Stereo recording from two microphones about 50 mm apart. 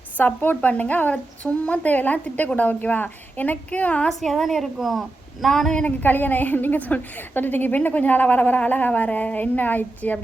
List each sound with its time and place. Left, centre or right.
0.2 s a woman's voice: left
4.2 s a woman's voice: centre
5.7 s a woman's voice: left